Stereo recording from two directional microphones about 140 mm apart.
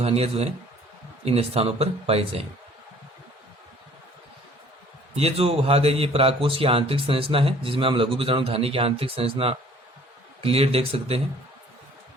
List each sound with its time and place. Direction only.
0.0 s speech: 45° right (ahead or behind)
5.1 s speech: 45° right (ahead or behind)